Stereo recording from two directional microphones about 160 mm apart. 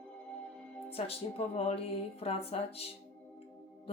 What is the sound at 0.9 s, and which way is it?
A woman's voice, 40° left (ahead or behind).